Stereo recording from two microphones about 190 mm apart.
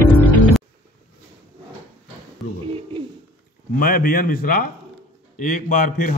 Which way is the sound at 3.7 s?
50° left (ahead or behind).